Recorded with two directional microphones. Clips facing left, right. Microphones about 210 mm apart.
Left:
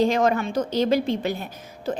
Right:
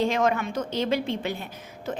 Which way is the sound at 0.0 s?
35° left (ahead or behind).